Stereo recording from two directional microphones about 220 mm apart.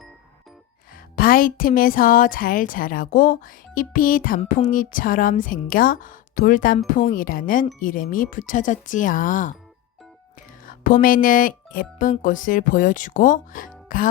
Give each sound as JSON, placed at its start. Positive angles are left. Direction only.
{"t": 1.1, "sound": "speech", "side_deg": 40}
{"t": 10.8, "sound": "speech", "side_deg": 40}